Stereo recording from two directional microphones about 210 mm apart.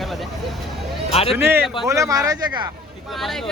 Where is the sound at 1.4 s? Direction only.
10° right (ahead or behind).